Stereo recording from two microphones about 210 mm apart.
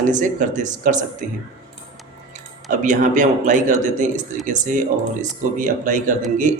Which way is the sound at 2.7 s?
35° right (ahead or behind).